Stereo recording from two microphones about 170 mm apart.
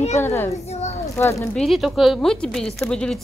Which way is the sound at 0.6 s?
40° left (ahead or behind).